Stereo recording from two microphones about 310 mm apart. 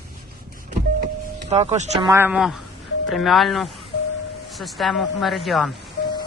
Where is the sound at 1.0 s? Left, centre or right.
Right.